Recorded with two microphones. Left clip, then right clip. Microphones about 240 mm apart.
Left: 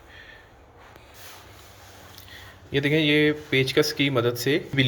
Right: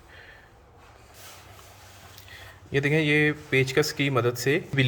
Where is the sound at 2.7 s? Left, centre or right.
Centre.